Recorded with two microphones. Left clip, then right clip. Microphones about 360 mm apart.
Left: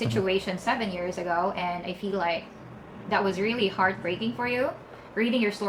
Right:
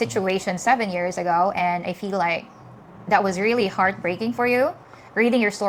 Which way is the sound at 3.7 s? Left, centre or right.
Right.